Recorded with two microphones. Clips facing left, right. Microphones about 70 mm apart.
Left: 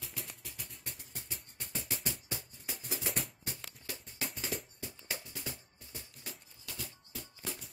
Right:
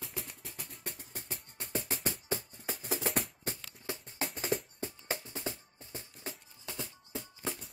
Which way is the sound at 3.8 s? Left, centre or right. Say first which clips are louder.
Right 5 dB; right.